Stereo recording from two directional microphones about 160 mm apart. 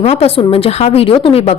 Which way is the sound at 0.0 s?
40° left (ahead or behind).